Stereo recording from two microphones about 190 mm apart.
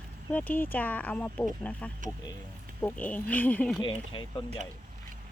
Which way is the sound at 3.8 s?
25° left (ahead or behind).